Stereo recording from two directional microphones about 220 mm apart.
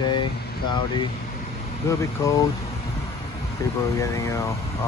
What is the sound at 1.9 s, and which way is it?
Speech, 15° left (ahead or behind).